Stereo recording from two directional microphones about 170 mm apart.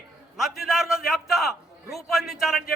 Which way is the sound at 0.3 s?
Centre (ahead or behind).